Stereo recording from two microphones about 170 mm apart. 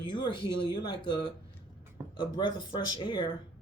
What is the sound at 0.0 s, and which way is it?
Speech, 25° left (ahead or behind).